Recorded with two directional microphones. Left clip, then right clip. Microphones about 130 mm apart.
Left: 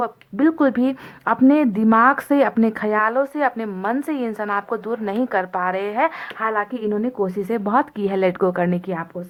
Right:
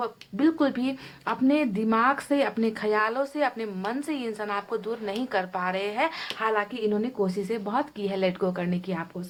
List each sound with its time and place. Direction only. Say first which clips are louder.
0.0 s speech: left 6 dB; 30° left (ahead or behind)